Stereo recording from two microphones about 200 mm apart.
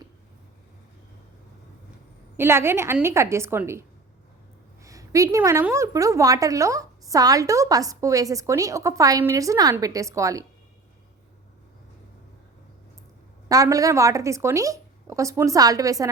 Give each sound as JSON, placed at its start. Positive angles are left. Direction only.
{"t": 2.3, "sound": "a woman's voice", "side_deg": -10}
{"t": 13.5, "sound": "a woman's voice", "side_deg": -15}